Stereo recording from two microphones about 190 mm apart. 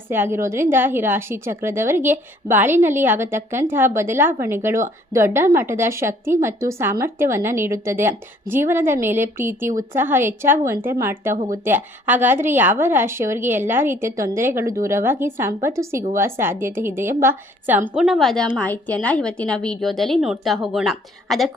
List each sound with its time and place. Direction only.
0.1 s a woman's voice: 10° right (ahead or behind)
17.9 s a woman's voice: centre (ahead or behind)